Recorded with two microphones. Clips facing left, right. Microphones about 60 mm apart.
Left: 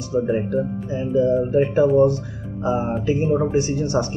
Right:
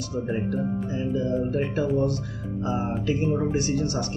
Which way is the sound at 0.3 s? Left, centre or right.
Left.